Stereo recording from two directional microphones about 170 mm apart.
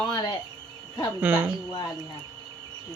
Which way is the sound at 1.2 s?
5° right (ahead or behind).